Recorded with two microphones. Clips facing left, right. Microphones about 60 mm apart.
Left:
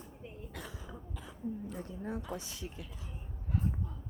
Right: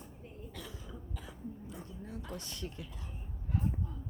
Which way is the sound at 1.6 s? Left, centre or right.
Left.